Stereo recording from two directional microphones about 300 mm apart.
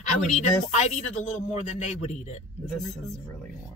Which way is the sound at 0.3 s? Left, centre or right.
Left.